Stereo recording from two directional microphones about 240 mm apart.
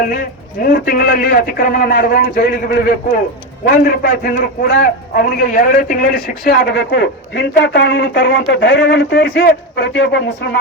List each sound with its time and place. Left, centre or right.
0.0 s a man's voice: left